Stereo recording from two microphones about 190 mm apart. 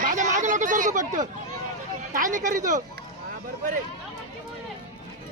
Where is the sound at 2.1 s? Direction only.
45° right (ahead or behind).